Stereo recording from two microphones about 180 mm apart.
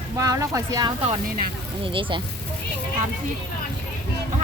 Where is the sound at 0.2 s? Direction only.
15° right (ahead or behind).